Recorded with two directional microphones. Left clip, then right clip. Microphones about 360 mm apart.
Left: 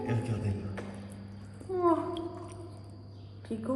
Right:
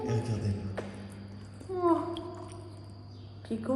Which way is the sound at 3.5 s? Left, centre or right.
Centre.